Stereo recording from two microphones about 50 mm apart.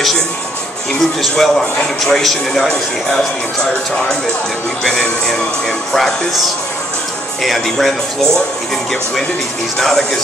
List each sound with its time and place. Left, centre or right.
1.3 s speech: centre
4.8 s speech: centre
9.8 s speech: centre